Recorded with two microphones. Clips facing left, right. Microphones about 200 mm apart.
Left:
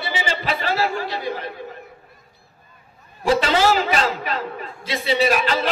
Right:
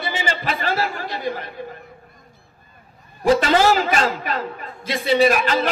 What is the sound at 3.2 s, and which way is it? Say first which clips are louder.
A man's voice: right 2 dB; 45° right (ahead or behind).